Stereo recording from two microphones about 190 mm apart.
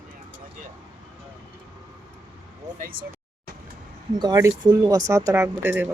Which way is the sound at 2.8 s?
50° right (ahead or behind).